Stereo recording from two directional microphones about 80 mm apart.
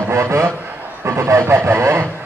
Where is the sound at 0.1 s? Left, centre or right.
Right.